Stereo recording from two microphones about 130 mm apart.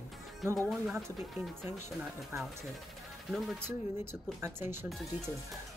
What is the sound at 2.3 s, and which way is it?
Speech, 20° right (ahead or behind).